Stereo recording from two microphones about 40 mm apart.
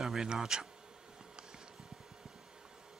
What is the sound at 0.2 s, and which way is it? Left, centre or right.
Speech, centre.